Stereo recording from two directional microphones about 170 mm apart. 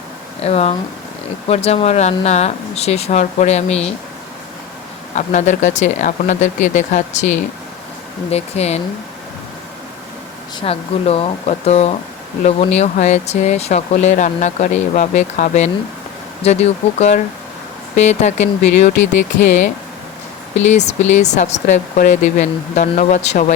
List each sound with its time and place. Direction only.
0.4 s speech: 35° left (ahead or behind)
5.1 s speech: 45° left (ahead or behind)
8.3 s speech: 40° left (ahead or behind)
10.6 s speech: 35° left (ahead or behind)
20.7 s speech: 45° left (ahead or behind)